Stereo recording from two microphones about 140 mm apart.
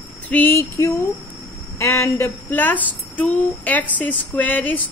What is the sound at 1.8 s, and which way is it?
Speech, 20° left (ahead or behind).